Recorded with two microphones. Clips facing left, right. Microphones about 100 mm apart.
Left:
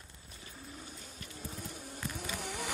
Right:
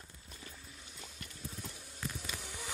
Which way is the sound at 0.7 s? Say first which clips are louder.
Left 5 dB; 45° left (ahead or behind).